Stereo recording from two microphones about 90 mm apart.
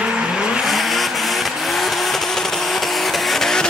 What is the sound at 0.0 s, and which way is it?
Vehicle, 10° right (ahead or behind).